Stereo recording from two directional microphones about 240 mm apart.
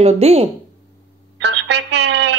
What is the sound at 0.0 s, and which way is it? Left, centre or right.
Speech, right.